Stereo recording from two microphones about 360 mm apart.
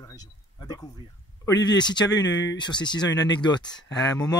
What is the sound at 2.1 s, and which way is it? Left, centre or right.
Speech, left.